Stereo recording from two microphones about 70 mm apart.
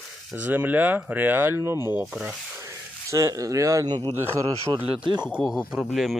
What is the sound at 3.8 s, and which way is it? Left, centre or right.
Speech, right.